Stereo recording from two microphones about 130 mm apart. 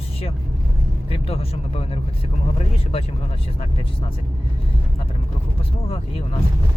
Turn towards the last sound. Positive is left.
turn(degrees=50)  # may be behind; listen again after turning